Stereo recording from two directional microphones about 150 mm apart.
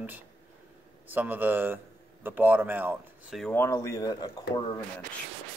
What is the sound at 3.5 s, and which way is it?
Speech, 15° left (ahead or behind).